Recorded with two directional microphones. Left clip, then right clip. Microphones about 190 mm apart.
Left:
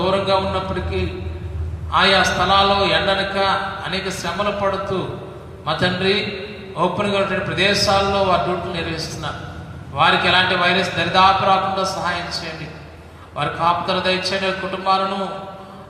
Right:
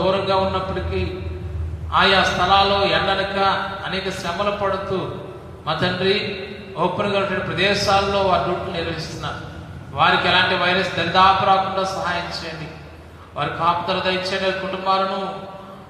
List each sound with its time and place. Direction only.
0.0 s a man's voice: 40° left (ahead or behind)